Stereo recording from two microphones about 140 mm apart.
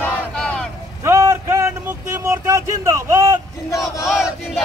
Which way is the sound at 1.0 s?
20° right (ahead or behind).